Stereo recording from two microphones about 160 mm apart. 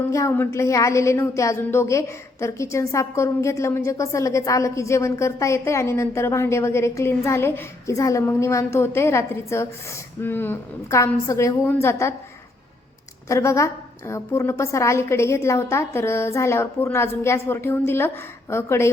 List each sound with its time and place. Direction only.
0.1 s a woman's voice: 20° left (ahead or behind)
13.2 s a woman's voice: 20° left (ahead or behind)